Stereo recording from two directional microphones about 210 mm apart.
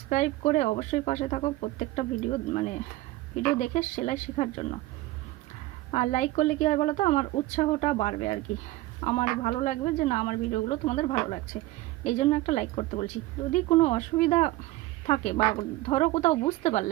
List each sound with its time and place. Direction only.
0.1 s speech: 35° left (ahead or behind)
5.9 s speech: 35° left (ahead or behind)